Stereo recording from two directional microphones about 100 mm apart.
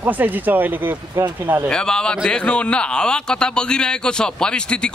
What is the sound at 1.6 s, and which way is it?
Speech, 10° left (ahead or behind).